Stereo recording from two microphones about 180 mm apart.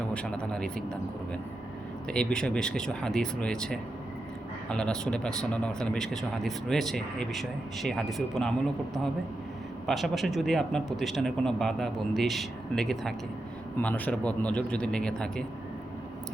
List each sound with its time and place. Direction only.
0.1 s speech: 5° left (ahead or behind)
2.0 s speech: 5° left (ahead or behind)
9.8 s a man's voice: centre (ahead or behind)